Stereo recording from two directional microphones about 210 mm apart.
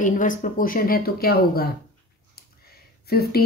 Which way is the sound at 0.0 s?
40° left (ahead or behind).